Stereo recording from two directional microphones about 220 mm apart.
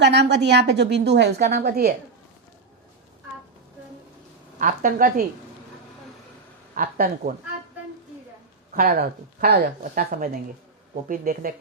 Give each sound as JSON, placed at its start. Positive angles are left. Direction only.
{"t": 0.0, "sound": "a woman's voice", "side_deg": -50}
{"t": 4.6, "sound": "a woman's voice", "side_deg": -35}
{"t": 6.7, "sound": "a woman's voice", "side_deg": -40}
{"t": 8.7, "sound": "a woman's voice", "side_deg": -45}